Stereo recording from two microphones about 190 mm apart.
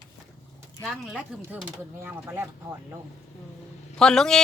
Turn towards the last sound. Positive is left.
turn(degrees=5)  # may be behind; listen again after turning